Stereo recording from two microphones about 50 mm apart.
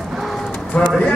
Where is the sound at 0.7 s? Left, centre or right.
Centre.